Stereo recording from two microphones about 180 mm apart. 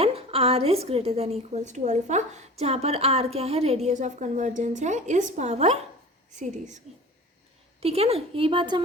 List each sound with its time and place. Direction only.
0.0 s a woman's voice: 30° right (ahead or behind)